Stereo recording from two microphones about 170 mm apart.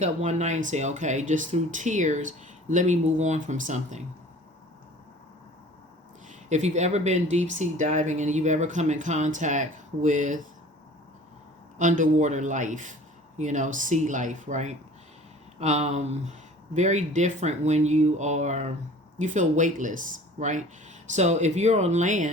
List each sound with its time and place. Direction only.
0.0 s speech: 40° right (ahead or behind)
6.2 s speech: 40° right (ahead or behind)
11.8 s speech: 45° right (ahead or behind)